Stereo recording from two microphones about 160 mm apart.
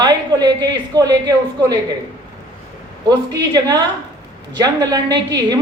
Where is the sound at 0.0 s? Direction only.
25° right (ahead or behind).